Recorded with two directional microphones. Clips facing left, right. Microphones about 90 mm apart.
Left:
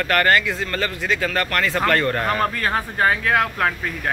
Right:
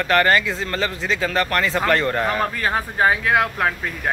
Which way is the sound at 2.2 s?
5° right (ahead or behind).